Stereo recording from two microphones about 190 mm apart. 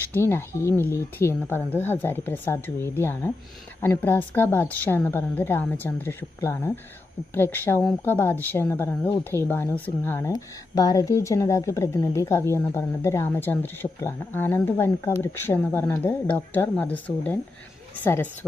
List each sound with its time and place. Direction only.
0.1 s speech: 10° left (ahead or behind)